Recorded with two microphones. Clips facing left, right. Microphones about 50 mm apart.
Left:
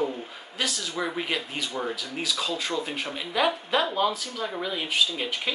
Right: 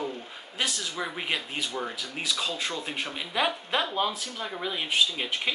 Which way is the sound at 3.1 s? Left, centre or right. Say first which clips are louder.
Left 3 dB; centre.